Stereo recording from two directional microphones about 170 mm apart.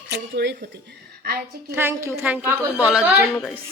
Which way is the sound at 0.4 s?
75° right (ahead or behind).